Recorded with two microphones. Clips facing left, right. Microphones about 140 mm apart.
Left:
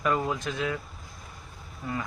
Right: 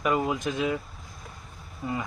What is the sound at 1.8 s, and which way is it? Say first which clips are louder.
Speech: right 3 dB; 20° right (ahead or behind).